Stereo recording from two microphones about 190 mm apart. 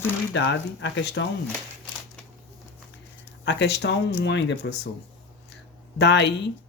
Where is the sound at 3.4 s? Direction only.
65° left (ahead or behind).